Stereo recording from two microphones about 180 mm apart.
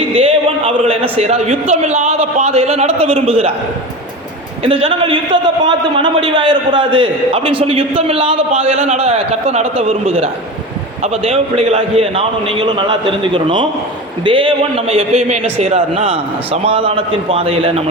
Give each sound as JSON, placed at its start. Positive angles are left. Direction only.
{"t": 0.2, "sound": "a man's voice", "side_deg": -30}
{"t": 4.6, "sound": "a man's voice", "side_deg": -30}